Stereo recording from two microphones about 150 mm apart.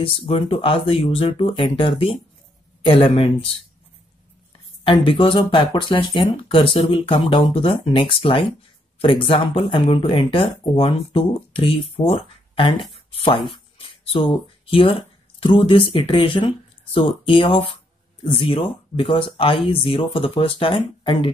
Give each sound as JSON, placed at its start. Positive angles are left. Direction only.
{"t": 0.0, "sound": "speech", "side_deg": 40}
{"t": 4.8, "sound": "speech", "side_deg": 35}
{"t": 13.1, "sound": "a sound", "side_deg": 35}
{"t": 15.4, "sound": "speech", "side_deg": 35}